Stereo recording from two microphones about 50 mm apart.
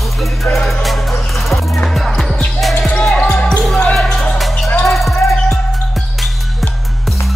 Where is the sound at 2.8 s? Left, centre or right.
Centre.